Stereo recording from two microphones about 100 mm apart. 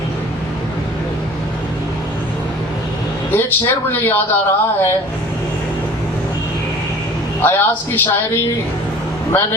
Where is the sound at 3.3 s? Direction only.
20° left (ahead or behind).